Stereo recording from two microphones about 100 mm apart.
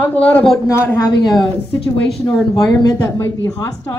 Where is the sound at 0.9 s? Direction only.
35° left (ahead or behind).